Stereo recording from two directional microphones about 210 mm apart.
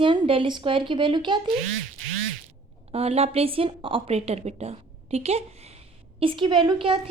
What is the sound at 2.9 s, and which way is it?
A woman's voice, 30° right (ahead or behind).